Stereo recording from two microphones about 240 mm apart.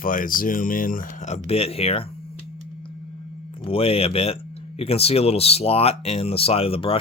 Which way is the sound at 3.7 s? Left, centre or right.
Left.